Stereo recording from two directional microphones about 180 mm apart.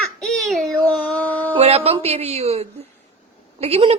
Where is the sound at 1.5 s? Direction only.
35° right (ahead or behind).